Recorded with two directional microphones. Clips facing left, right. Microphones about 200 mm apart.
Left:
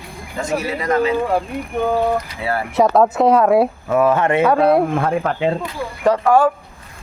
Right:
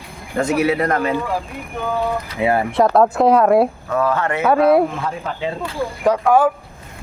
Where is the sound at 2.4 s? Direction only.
20° right (ahead or behind).